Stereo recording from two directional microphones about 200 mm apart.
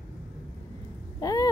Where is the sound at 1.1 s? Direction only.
20° left (ahead or behind).